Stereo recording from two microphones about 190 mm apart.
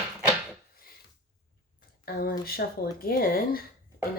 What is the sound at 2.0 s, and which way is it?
Speech, 55° left (ahead or behind).